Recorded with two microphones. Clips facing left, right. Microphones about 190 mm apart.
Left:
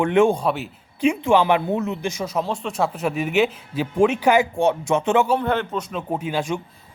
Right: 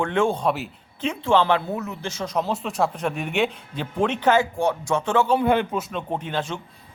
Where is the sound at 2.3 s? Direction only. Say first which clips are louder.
Even; centre (ahead or behind).